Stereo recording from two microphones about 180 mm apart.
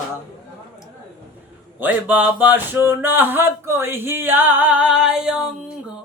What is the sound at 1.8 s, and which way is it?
Speech, 10° right (ahead or behind).